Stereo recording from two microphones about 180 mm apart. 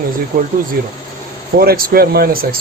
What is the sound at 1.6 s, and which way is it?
Speech, 60° right (ahead or behind).